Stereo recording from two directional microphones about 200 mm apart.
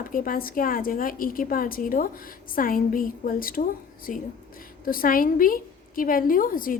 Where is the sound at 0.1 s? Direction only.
45° left (ahead or behind).